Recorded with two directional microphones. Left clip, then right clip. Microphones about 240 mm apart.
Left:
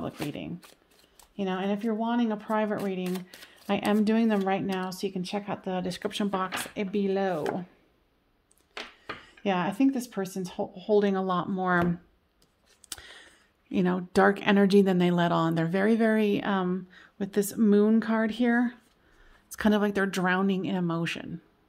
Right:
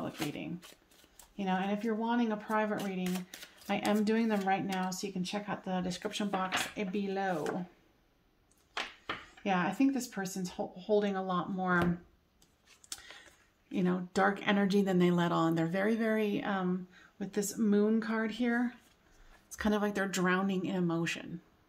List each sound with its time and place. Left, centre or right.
1.3 s speech: left
9.4 s speech: left
12.8 s a sound: left
13.7 s speech: left